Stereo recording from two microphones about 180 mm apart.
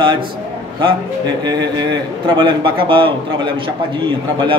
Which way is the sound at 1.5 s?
25° right (ahead or behind).